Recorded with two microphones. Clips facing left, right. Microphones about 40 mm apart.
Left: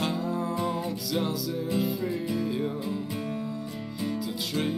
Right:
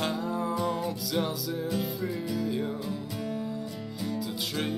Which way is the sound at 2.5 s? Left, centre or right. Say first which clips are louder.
Left 1 dB; centre.